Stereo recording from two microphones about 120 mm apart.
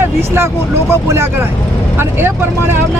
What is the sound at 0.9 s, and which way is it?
Speech, 20° right (ahead or behind).